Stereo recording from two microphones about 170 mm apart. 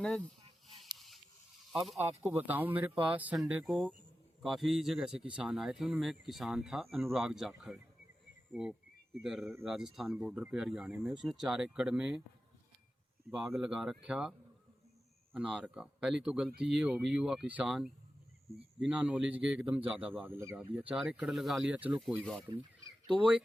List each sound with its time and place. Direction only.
0.9 s a sound: centre (ahead or behind)
1.7 s speech: centre (ahead or behind)
2.0 s speech: 15° right (ahead or behind)
9.2 s speech: centre (ahead or behind)
13.3 s speech: 5° right (ahead or behind)
22.2 s speech: 5° left (ahead or behind)